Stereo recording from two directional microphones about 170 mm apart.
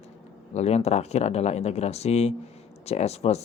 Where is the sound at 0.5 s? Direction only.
40° left (ahead or behind).